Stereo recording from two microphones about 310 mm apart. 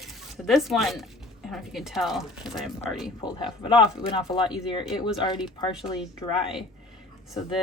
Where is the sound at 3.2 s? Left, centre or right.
Centre.